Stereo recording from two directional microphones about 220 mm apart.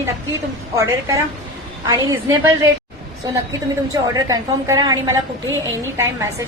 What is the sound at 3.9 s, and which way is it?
A woman's voice, 15° right (ahead or behind).